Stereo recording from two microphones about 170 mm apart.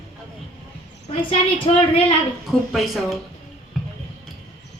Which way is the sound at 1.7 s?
30° left (ahead or behind).